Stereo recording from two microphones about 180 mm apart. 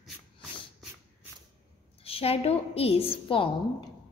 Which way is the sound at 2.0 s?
30° left (ahead or behind).